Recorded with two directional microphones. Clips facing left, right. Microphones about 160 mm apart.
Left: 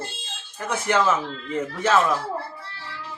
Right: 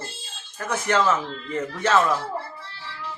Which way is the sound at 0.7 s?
20° left (ahead or behind).